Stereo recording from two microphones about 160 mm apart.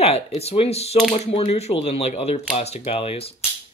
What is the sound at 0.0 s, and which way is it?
Speech, 40° left (ahead or behind).